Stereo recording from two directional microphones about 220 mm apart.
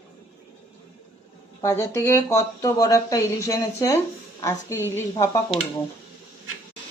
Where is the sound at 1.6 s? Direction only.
10° left (ahead or behind).